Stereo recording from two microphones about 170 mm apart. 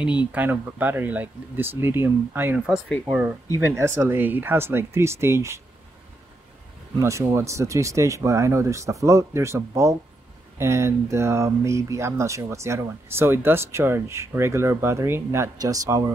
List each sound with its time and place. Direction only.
0.3 s speech: 10° right (ahead or behind)
7.0 s speech: 15° right (ahead or behind)